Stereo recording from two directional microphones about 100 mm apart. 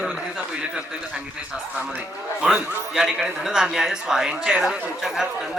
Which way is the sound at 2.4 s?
10° right (ahead or behind).